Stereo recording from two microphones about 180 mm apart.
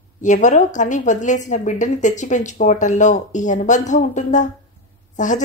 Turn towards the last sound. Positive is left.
turn(degrees=45)  # may be behind; listen again after turning